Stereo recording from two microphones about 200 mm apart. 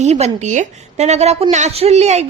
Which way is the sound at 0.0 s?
35° right (ahead or behind).